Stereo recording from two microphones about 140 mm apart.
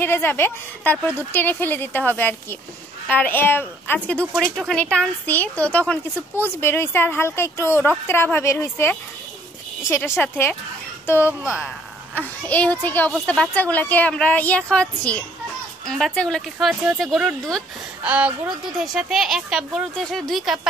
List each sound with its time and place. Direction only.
0.0 s speech: 15° left (ahead or behind)
11.2 s a woman's voice: 10° right (ahead or behind)
12.2 s a woman's voice: 10° left (ahead or behind)